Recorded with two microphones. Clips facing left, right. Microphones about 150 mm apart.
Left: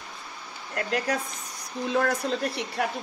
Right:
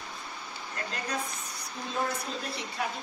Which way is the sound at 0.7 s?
75° left (ahead or behind).